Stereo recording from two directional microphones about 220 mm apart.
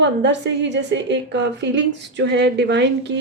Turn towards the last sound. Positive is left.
turn(degrees=-50)  # may be behind; listen again after turning